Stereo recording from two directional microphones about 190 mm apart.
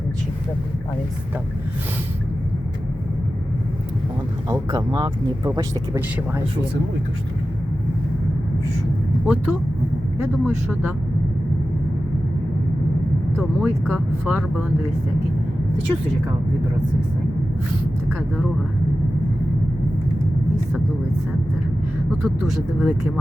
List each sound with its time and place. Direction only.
4.4 s speech: 20° right (ahead or behind)
9.2 s speech: 5° right (ahead or behind)
13.6 s speech: 5° right (ahead or behind)
22.2 s speech: centre (ahead or behind)